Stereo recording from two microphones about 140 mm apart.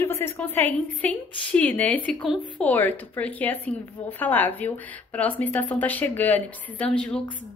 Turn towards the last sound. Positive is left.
turn(degrees=5)  # may be behind; listen again after turning